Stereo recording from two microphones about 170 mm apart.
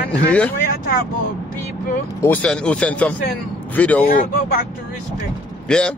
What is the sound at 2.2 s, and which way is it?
Speech, 10° left (ahead or behind).